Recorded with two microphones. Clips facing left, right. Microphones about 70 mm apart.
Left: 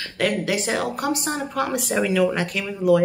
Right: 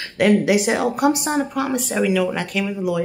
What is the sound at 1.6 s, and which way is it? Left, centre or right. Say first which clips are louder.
Speech: right 2 dB; centre.